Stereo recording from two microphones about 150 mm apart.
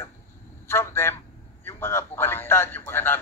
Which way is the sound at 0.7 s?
15° left (ahead or behind).